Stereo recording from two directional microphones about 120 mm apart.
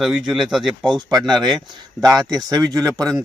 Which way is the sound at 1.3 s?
35° right (ahead or behind).